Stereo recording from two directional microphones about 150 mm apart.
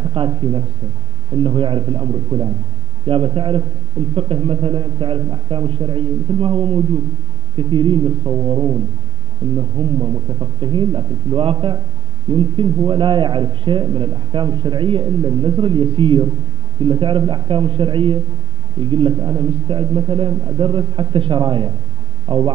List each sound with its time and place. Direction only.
0.1 s a man's voice: 35° right (ahead or behind)